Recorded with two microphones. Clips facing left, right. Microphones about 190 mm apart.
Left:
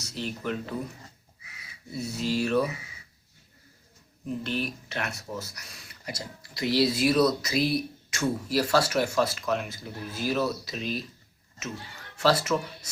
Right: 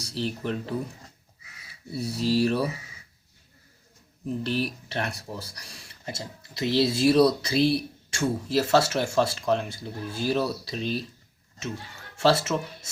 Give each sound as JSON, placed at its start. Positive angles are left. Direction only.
{"t": 0.0, "sound": "speech", "side_deg": -30}
{"t": 1.9, "sound": "speech", "side_deg": -35}
{"t": 4.4, "sound": "speech", "side_deg": -35}
{"t": 12.1, "sound": "speech", "side_deg": -25}